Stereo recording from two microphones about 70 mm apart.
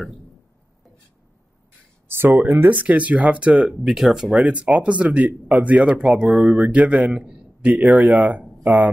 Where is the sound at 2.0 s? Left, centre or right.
Right.